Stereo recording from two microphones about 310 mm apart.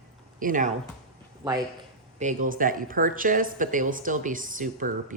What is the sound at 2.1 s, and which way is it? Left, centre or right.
Speech, right.